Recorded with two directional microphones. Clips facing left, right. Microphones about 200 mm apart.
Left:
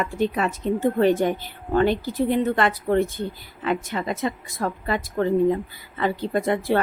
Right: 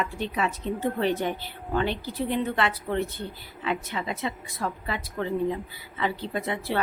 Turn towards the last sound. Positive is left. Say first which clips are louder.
# left 7 dB
turn(degrees=45)  # may be behind; listen again after turning